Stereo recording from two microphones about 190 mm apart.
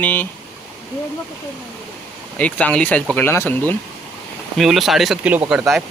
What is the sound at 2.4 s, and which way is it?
Speech, 5° left (ahead or behind).